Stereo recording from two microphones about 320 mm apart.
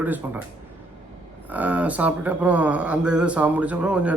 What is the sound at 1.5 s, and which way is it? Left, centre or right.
A man's voice, centre.